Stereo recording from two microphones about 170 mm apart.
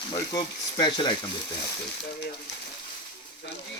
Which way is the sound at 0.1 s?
25° left (ahead or behind).